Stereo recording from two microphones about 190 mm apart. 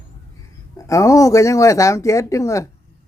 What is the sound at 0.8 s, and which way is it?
Speech, 15° left (ahead or behind).